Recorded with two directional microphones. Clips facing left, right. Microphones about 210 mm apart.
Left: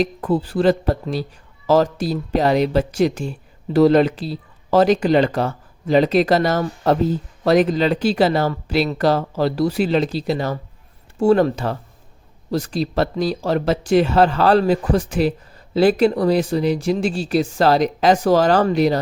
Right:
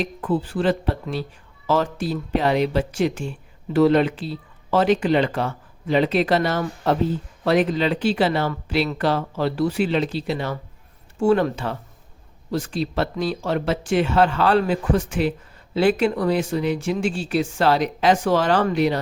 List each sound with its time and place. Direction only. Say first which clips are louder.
0.0 s speech: left 4 dB; 40° left (ahead or behind)